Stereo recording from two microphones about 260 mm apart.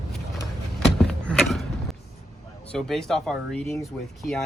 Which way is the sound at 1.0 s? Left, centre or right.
Centre.